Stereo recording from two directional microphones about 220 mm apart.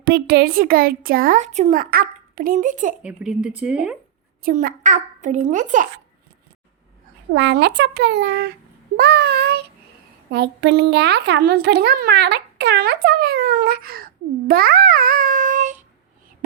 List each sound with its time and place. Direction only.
0.0 s a child's voice: 45° right (ahead or behind)
3.0 s speech: 5° right (ahead or behind)
4.4 s a child's voice: 40° right (ahead or behind)
7.3 s a child's voice: 50° right (ahead or behind); by 15.8 s 35° right (ahead or behind)